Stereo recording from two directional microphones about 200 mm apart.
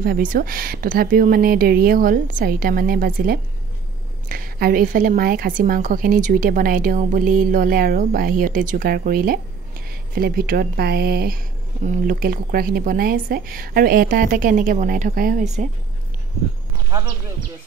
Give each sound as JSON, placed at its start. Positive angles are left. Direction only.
{"t": 0.0, "sound": "a woman's voice", "side_deg": -45}